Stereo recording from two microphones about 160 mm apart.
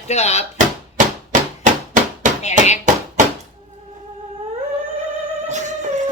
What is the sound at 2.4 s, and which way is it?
Speech, 45° left (ahead or behind).